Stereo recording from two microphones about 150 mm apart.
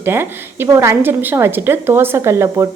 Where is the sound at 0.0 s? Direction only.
15° right (ahead or behind).